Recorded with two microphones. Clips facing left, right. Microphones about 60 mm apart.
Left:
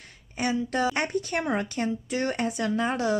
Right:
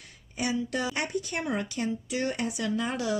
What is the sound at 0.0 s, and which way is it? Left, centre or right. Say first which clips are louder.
A woman's voice: left 3 dB; left.